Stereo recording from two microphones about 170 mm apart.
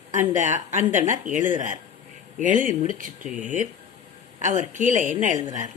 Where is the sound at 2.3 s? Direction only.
50° right (ahead or behind).